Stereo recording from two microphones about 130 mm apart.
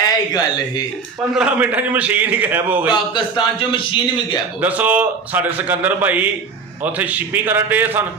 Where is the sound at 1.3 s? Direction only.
10° right (ahead or behind).